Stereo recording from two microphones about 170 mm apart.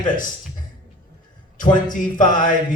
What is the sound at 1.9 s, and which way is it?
Speech, 50° left (ahead or behind).